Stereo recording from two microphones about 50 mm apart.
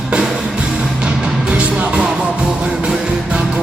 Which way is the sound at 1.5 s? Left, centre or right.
Right.